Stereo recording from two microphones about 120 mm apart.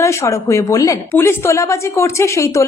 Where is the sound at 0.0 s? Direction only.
25° left (ahead or behind).